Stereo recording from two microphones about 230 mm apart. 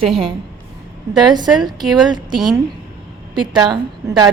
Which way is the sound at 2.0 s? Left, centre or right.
Centre.